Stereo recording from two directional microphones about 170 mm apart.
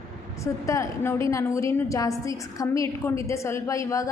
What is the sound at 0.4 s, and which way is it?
A woman's voice, 15° left (ahead or behind).